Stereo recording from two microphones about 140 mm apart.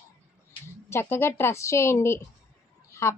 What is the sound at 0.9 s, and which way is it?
A woman's voice, 15° left (ahead or behind).